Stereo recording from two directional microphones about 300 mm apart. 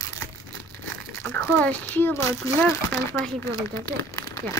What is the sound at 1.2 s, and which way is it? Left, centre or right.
Speech, centre.